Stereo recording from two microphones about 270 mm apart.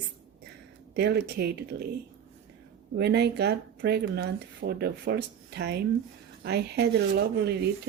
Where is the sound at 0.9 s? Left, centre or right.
Right.